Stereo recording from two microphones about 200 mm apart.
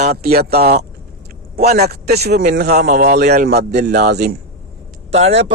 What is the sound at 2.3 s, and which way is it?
A man's voice, 45° right (ahead or behind).